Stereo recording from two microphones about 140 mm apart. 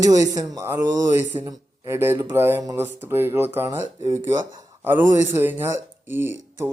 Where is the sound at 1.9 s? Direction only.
15° right (ahead or behind).